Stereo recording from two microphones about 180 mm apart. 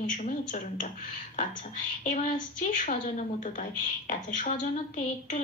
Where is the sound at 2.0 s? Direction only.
45° left (ahead or behind).